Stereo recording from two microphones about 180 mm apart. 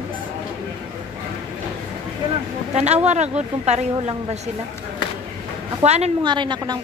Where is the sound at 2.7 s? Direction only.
40° right (ahead or behind).